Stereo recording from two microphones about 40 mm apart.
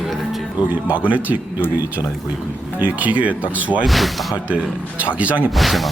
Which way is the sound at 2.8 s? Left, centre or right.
Right.